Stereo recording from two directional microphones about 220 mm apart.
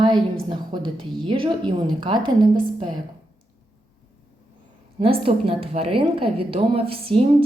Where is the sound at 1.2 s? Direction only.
20° right (ahead or behind).